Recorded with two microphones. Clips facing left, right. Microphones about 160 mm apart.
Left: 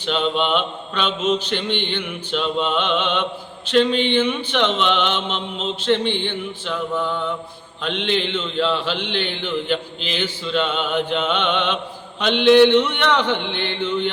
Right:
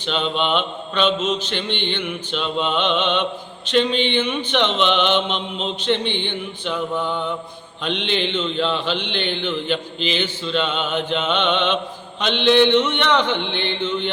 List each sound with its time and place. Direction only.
0.0 s mantra: 5° left (ahead or behind)
7.9 s mantra: centre (ahead or behind)